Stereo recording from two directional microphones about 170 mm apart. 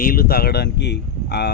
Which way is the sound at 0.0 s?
60° left (ahead or behind).